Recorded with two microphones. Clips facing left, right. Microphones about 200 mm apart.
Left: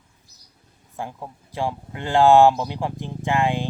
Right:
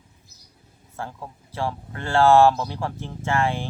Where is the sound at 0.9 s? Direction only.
15° left (ahead or behind).